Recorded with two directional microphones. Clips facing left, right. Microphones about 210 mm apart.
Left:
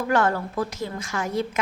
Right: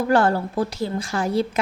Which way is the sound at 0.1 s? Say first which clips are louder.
Right 3 dB; 30° right (ahead or behind).